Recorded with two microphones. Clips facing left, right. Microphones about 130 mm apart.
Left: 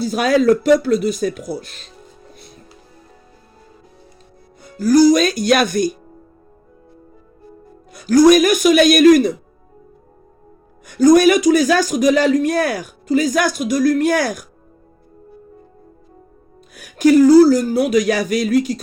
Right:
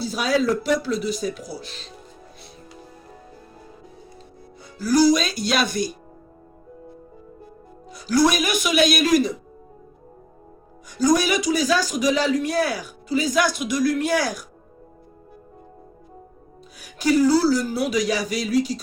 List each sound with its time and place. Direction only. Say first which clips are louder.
0.0 s a man's voice: left 7 dB; 50° left (ahead or behind)
4.8 s a man's voice: left 6 dB; 50° left (ahead or behind)
7.9 s a man's voice: left 9 dB; 55° left (ahead or behind)
10.8 s a man's voice: left 9 dB; 55° left (ahead or behind)
16.7 s a man's voice: left 8 dB; 50° left (ahead or behind)